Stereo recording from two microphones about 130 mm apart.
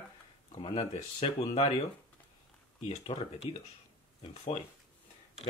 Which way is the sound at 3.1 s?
45° left (ahead or behind).